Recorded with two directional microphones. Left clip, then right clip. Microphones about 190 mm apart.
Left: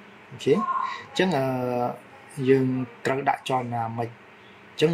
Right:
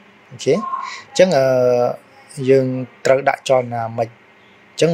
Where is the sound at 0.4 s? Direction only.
40° right (ahead or behind).